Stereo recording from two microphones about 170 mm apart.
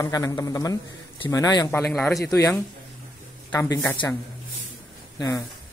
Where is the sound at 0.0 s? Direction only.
20° left (ahead or behind).